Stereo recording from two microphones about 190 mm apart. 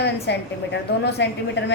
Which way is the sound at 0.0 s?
65° left (ahead or behind).